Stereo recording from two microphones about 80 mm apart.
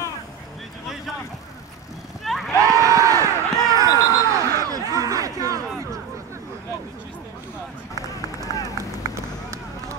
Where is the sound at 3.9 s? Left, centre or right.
Left.